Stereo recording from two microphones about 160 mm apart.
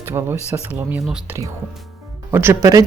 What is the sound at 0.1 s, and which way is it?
Speech, 15° right (ahead or behind).